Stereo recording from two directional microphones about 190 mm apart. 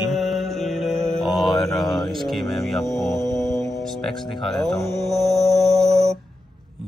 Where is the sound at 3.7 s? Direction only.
Centre (ahead or behind).